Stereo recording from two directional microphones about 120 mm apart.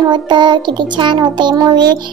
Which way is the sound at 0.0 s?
40° right (ahead or behind).